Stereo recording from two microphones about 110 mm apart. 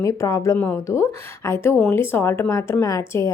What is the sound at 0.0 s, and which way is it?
A woman's voice, 30° left (ahead or behind).